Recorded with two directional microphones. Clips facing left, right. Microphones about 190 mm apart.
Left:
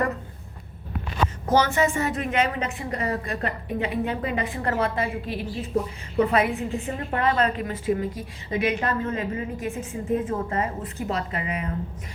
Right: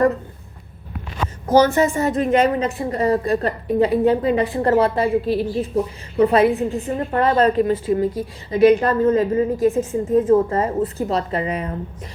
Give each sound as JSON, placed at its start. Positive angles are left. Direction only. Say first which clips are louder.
{"t": 1.5, "sound": "a woman's voice", "louder": "right 6 dB", "side_deg": -40}